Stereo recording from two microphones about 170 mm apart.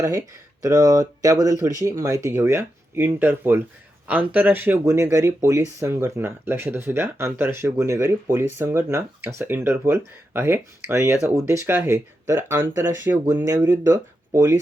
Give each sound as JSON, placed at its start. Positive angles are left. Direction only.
{"t": 0.6, "sound": "speech", "side_deg": -20}